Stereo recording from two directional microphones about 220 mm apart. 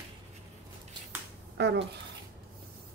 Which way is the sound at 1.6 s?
50° right (ahead or behind).